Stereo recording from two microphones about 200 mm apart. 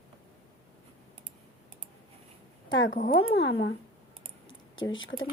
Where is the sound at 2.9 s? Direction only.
40° left (ahead or behind).